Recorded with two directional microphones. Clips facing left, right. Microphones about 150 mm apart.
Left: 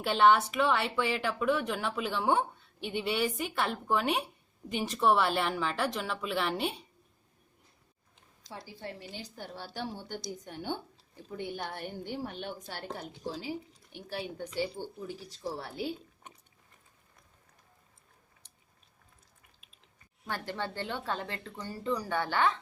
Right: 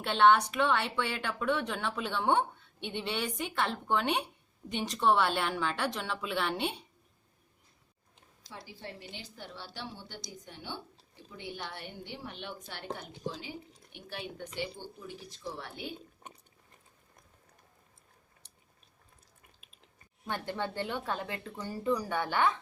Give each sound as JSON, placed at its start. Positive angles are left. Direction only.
{"t": 0.0, "sound": "speech", "side_deg": 5}
{"t": 9.1, "sound": "a woman's voice", "side_deg": 45}
{"t": 20.2, "sound": "speech", "side_deg": -20}